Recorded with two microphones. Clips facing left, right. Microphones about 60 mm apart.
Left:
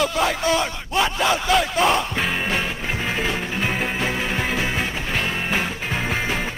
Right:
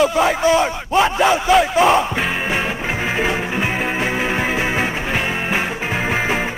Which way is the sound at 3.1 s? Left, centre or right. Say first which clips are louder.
Right 5 dB; centre.